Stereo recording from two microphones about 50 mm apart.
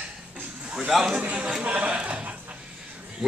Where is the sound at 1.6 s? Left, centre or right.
Right.